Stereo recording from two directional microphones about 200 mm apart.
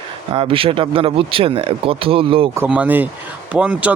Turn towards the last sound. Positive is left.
turn(degrees=-5)  # may be behind; listen again after turning